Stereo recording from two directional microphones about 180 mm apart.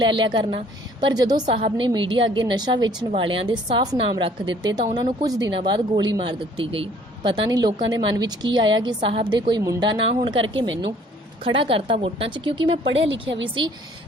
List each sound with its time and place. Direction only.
0.0 s a woman's voice: 25° right (ahead or behind)
12.9 s a woman's voice: 90° right
13.4 s a woman's voice: 25° right (ahead or behind)